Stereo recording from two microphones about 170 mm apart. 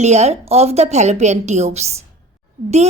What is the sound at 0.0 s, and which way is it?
A woman's voice, 40° right (ahead or behind).